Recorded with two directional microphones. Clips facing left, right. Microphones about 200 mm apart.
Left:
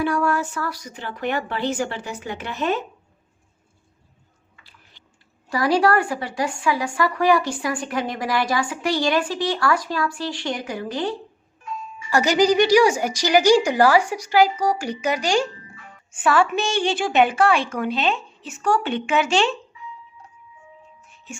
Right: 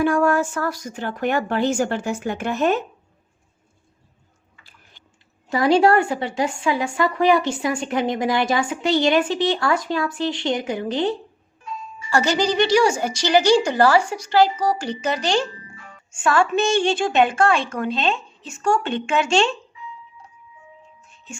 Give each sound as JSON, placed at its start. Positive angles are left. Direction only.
{"t": 0.0, "sound": "speech", "side_deg": -50}
{"t": 5.5, "sound": "a woman's voice", "side_deg": -25}
{"t": 12.1, "sound": "a woman's voice", "side_deg": 15}